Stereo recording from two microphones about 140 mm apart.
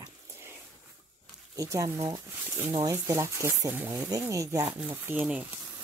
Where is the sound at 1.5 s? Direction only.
25° right (ahead or behind).